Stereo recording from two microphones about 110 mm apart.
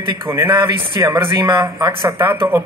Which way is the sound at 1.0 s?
30° right (ahead or behind).